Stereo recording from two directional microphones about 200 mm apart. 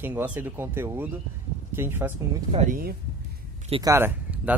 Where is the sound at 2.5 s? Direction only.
35° right (ahead or behind).